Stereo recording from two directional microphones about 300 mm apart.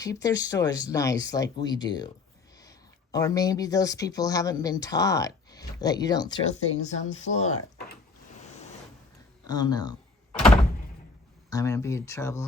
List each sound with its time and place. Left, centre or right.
0.0 s speech: centre
9.5 s speech: centre
11.5 s speech: centre